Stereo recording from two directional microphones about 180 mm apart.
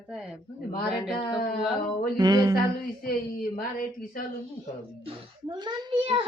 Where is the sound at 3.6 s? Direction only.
50° left (ahead or behind).